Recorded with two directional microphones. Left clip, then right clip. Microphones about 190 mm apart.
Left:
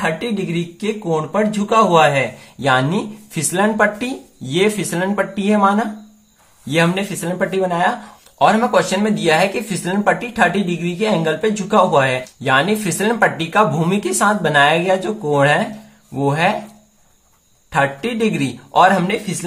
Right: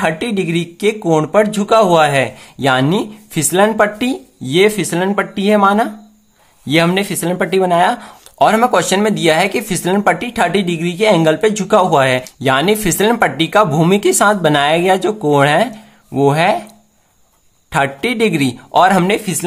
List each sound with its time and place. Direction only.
0.0 s speech: 45° right (ahead or behind)
17.6 s speech: 40° right (ahead or behind)